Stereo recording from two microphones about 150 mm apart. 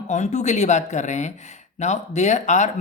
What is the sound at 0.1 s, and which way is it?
Speech, 50° left (ahead or behind).